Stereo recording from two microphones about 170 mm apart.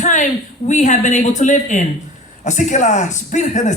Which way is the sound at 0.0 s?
45° left (ahead or behind).